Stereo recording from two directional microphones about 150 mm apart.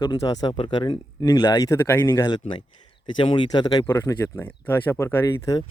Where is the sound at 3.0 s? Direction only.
30° left (ahead or behind).